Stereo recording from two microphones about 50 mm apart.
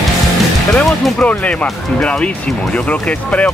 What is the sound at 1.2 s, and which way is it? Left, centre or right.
Speech, left.